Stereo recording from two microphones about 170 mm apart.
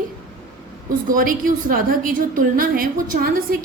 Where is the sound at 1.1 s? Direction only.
55° right (ahead or behind).